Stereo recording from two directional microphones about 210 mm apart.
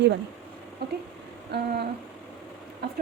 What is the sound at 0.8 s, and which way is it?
Speech, 50° right (ahead or behind).